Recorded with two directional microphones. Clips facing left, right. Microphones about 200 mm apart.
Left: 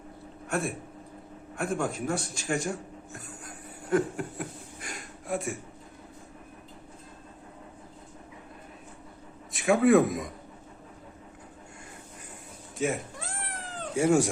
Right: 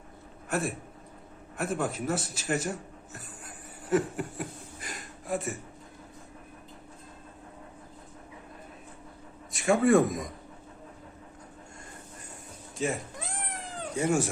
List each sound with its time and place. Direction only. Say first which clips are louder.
0.4 s a man's voice: even; centre (ahead or behind)
9.5 s a man's voice: left 1 dB; centre (ahead or behind)
12.7 s speech: left 2 dB; centre (ahead or behind)
13.1 s cat: right 1 dB; 15° right (ahead or behind)
13.9 s speech: left 4 dB; 10° left (ahead or behind)